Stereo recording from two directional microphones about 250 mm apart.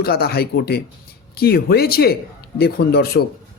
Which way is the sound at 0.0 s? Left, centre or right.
Left.